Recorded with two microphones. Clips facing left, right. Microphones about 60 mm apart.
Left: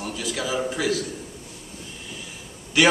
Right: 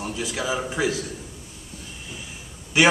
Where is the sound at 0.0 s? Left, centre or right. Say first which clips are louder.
Right 1 dB; centre.